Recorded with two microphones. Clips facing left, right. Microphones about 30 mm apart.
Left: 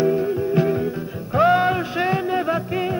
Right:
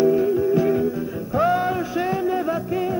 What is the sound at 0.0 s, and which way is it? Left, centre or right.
Music, centre.